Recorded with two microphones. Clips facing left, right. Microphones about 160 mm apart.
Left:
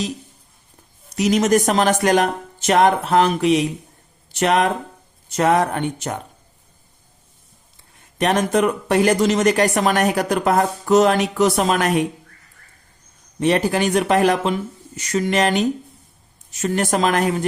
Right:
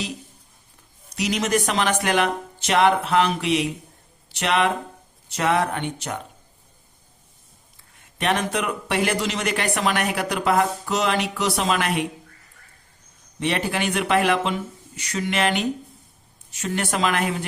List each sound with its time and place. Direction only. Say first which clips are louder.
1.1 s speech: left 7 dB; 45° left (ahead or behind)
8.2 s speech: left 6 dB; 40° left (ahead or behind)
13.4 s speech: left 6 dB; 40° left (ahead or behind)